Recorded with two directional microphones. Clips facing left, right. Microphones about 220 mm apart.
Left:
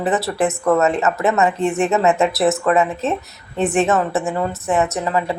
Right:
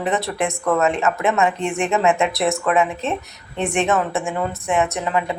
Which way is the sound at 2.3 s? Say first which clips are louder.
Left 3 dB; centre (ahead or behind).